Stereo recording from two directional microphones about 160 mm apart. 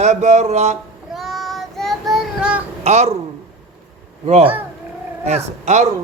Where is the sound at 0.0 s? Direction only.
45° right (ahead or behind).